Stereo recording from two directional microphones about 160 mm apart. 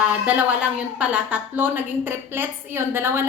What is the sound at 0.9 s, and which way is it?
A woman's voice, 10° right (ahead or behind).